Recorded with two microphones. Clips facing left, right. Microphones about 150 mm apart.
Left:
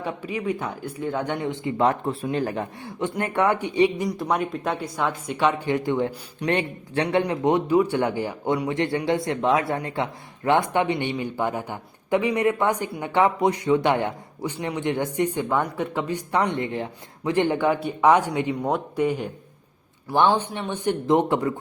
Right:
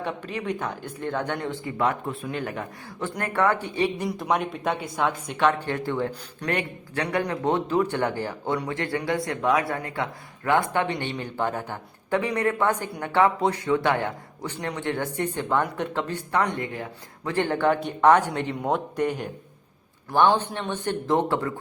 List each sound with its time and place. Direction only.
0.0 s a man's voice: 10° left (ahead or behind)
1.8 s speech: 30° left (ahead or behind); by 4.0 s 15° left (ahead or behind)
4.0 s speech: centre (ahead or behind)
6.5 s speech: 25° left (ahead or behind)
7.3 s a man's voice: 15° left (ahead or behind)